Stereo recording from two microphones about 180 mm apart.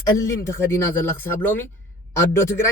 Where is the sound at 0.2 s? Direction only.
15° left (ahead or behind).